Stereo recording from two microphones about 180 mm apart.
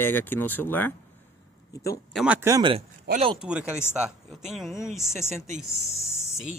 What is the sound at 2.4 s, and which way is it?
Speech, 20° right (ahead or behind).